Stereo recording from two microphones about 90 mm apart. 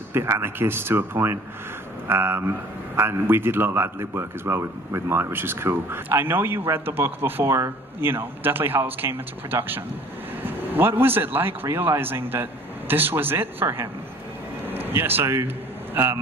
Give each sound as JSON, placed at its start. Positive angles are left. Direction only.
{"t": 0.1, "sound": "a man's voice", "side_deg": -25}